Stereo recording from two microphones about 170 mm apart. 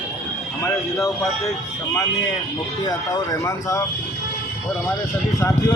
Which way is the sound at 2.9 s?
20° left (ahead or behind).